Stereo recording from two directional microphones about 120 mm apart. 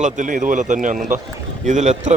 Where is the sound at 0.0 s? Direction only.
90° right.